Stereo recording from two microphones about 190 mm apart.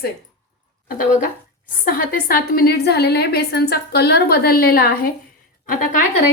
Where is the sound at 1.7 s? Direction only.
50° left (ahead or behind).